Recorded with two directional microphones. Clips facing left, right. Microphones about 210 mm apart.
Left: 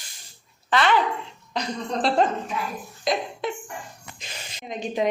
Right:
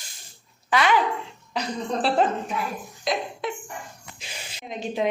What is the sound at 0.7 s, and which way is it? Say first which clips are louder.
A woman's voice: even; 10° right (ahead or behind).